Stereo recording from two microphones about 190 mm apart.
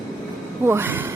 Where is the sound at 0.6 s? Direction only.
10° right (ahead or behind).